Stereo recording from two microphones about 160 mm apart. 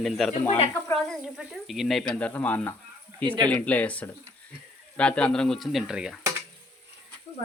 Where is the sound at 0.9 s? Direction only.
Centre (ahead or behind).